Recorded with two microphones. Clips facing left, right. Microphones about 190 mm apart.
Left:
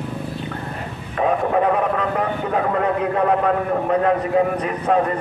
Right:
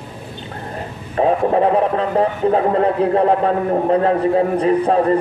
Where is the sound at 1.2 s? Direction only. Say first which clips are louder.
Right 4 dB; 30° right (ahead or behind).